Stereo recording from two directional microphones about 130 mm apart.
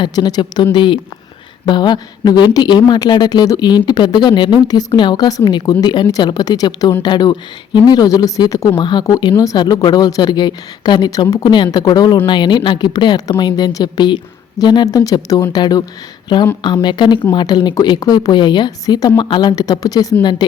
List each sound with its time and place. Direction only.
0.0 s speech: 30° left (ahead or behind)